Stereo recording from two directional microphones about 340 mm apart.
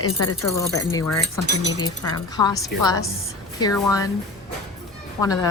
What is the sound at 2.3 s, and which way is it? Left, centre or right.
Speech, centre.